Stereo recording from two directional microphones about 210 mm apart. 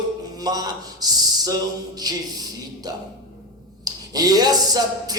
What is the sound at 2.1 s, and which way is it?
Music, 20° right (ahead or behind).